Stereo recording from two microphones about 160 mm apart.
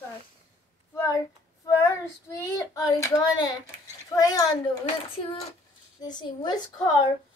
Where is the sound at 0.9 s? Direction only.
20° left (ahead or behind).